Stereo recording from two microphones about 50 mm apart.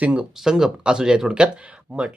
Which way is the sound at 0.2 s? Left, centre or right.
Centre.